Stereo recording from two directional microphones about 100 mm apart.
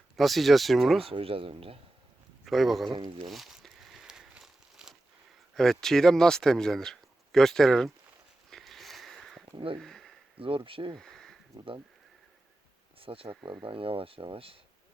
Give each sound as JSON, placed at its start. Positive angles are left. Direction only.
{"t": 0.2, "sound": "speech", "side_deg": 0}
{"t": 1.0, "sound": "speech", "side_deg": -70}
{"t": 2.4, "sound": "a man's voice", "side_deg": 0}
{"t": 3.2, "sound": "crumpling", "side_deg": 0}
{"t": 5.5, "sound": "speech", "side_deg": 5}
{"t": 8.4, "sound": "sniff", "side_deg": 0}
{"t": 9.5, "sound": "speech", "side_deg": -50}
{"t": 9.8, "sound": "a sound", "side_deg": 5}
{"t": 10.3, "sound": "speech", "side_deg": -60}
{"t": 10.9, "sound": "a sound", "side_deg": 5}
{"t": 13.0, "sound": "speech", "side_deg": -65}
{"t": 13.4, "sound": "speech", "side_deg": -55}